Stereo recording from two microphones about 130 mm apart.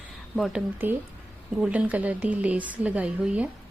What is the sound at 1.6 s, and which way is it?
A woman's voice, 10° right (ahead or behind).